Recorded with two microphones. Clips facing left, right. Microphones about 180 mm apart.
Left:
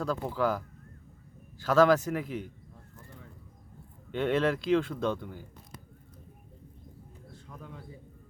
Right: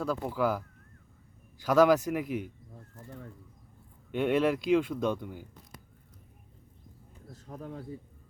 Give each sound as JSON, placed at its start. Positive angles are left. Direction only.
{"t": 0.0, "sound": "a man's voice", "side_deg": -10}
{"t": 4.1, "sound": "a man's voice", "side_deg": -10}
{"t": 7.4, "sound": "speech", "side_deg": -40}